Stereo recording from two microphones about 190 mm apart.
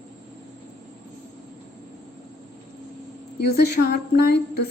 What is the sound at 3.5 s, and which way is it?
Speech, 60° left (ahead or behind).